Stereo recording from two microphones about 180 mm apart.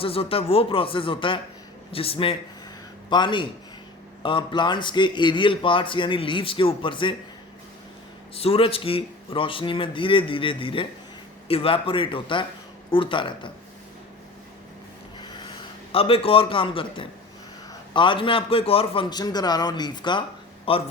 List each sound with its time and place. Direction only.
0.0 s a man's voice: 30° left (ahead or behind)
8.4 s a man's voice: 30° left (ahead or behind)
15.2 s a sound: 25° left (ahead or behind)
17.9 s a man's voice: 25° left (ahead or behind)